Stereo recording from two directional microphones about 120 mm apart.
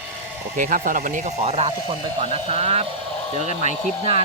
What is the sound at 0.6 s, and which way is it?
Speech, 90° right.